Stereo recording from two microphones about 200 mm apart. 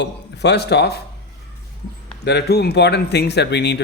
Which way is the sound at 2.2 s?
55° left (ahead or behind).